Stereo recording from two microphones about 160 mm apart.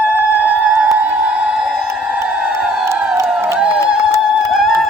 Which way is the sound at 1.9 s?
15° right (ahead or behind).